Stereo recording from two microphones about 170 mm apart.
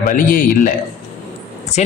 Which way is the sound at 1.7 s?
40° left (ahead or behind).